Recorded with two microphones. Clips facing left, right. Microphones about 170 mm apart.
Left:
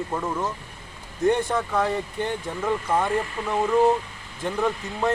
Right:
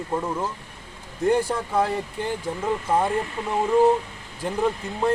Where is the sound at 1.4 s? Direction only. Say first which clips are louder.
Right 1 dB; 35° right (ahead or behind).